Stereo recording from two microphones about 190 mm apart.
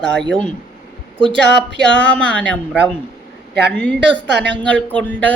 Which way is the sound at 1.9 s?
5° left (ahead or behind).